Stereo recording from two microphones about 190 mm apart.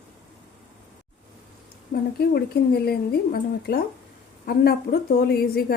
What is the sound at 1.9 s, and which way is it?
A woman's voice, 55° left (ahead or behind).